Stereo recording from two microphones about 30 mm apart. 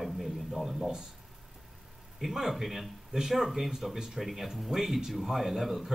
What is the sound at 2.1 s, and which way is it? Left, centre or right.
A man's voice, centre.